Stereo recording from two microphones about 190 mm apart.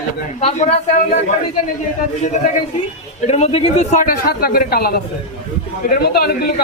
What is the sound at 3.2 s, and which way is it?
A man's voice, 35° left (ahead or behind).